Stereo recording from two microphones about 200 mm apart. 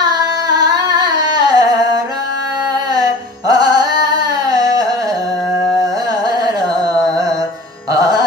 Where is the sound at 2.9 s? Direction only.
20° right (ahead or behind).